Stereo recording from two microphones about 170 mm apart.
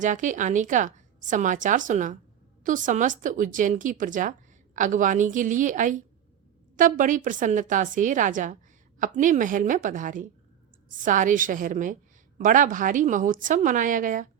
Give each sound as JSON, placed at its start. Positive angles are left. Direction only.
{"t": 0.0, "sound": "speech", "side_deg": -50}